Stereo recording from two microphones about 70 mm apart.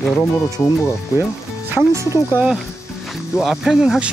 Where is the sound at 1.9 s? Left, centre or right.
Right.